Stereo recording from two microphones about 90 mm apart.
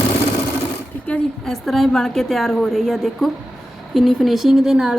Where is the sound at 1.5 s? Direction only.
Centre (ahead or behind).